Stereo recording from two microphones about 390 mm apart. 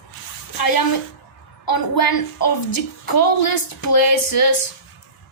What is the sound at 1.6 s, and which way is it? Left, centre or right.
A woman's voice, left.